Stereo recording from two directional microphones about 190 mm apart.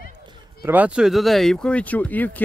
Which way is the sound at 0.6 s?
10° right (ahead or behind).